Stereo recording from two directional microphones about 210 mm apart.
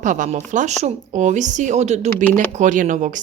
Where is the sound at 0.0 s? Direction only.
35° right (ahead or behind).